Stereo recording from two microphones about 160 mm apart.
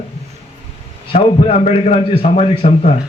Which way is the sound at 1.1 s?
35° left (ahead or behind).